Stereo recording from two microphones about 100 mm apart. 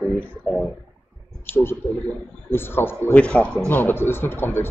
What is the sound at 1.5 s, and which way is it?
Speech, 25° left (ahead or behind).